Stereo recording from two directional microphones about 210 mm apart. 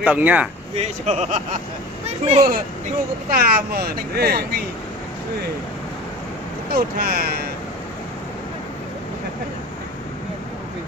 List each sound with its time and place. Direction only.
0.0 s speech: 5° right (ahead or behind)
0.7 s speech: 30° right (ahead or behind)
3.3 s speech: 45° right (ahead or behind)
6.7 s speech: 45° right (ahead or behind)